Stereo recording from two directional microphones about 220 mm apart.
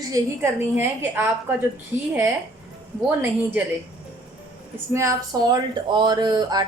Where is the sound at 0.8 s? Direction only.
10° right (ahead or behind).